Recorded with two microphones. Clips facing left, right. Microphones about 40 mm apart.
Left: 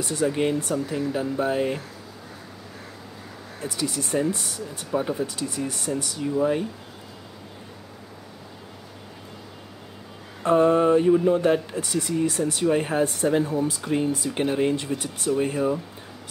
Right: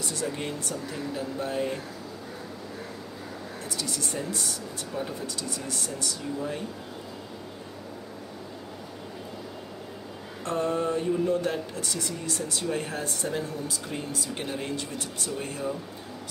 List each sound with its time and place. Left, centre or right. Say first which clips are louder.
0.0 s speech: left 8 dB; centre
0.7 s speech: left 7 dB; centre
1.2 s speech: left 4 dB; centre
3.6 s speech: left 6 dB; centre
10.4 s mantra: left 9 dB; left
11.2 s speech: left 7 dB; left